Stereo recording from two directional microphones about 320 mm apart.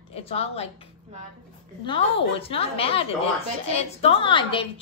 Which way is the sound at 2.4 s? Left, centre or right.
Centre.